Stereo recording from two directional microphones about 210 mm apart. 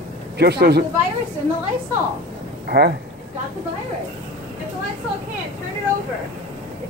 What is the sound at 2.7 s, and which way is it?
Speech, 50° right (ahead or behind).